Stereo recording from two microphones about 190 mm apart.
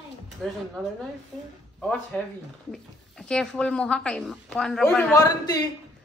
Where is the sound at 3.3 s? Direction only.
5° left (ahead or behind).